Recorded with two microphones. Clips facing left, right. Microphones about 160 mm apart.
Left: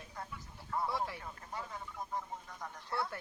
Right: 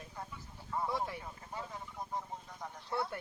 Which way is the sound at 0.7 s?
15° right (ahead or behind).